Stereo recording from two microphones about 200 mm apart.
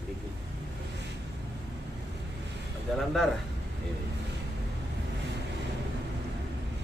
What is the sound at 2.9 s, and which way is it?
Speech, centre (ahead or behind).